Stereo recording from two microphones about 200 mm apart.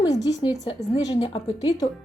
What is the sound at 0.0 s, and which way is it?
A woman's voice, 25° left (ahead or behind).